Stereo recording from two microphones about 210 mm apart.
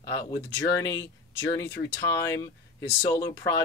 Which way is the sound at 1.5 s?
10° left (ahead or behind).